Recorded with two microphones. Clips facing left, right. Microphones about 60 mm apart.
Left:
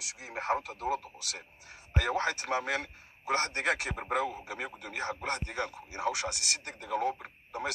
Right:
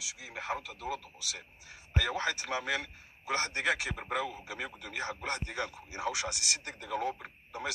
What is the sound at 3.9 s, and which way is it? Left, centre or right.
A man's voice, left.